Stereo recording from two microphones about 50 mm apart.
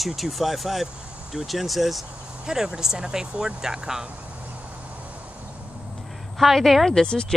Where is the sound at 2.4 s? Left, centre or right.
Centre.